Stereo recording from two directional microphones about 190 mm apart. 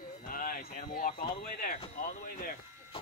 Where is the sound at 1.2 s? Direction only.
30° left (ahead or behind).